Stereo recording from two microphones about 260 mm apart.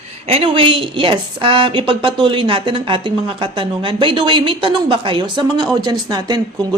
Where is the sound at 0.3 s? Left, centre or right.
Right.